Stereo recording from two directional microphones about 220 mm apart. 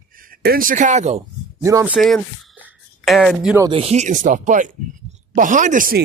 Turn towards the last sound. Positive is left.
turn(degrees=-35)  # may be behind; listen again after turning